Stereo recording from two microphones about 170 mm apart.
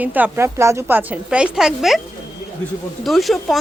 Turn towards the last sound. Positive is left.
turn(degrees=0)  # may be behind; listen again after turning